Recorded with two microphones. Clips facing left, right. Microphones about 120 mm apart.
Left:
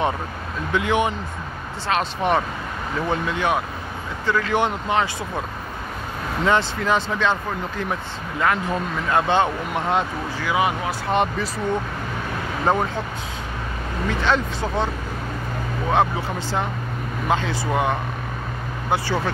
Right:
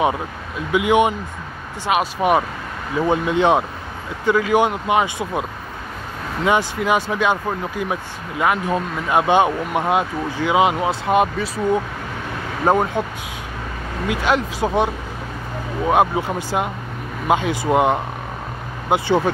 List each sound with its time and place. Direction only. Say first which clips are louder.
0.7 s speech: right 5 dB; 15° right (ahead or behind)
4.3 s speech: right 5 dB; 10° right (ahead or behind)
6.4 s speech: right 2 dB; 10° right (ahead or behind)
11.1 s speech: right 3 dB; 5° right (ahead or behind)
14.0 s speech: right 2 dB; 10° right (ahead or behind)
15.9 s speech: right 4 dB; 15° right (ahead or behind)